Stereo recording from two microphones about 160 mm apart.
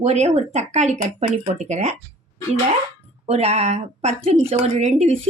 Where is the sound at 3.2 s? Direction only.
40° right (ahead or behind).